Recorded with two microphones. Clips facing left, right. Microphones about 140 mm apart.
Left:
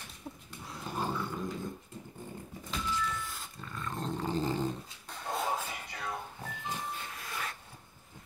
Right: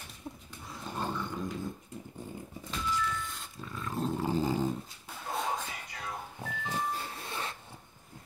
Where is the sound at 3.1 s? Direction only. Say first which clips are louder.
Right 1 dB; centre (ahead or behind).